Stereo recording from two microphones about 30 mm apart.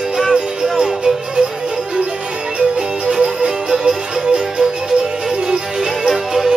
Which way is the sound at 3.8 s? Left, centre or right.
Right.